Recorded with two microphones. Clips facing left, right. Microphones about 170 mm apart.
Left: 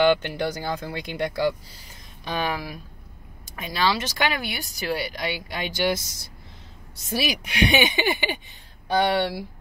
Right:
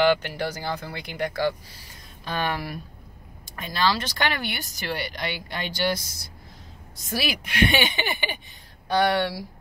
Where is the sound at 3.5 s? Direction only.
10° left (ahead or behind).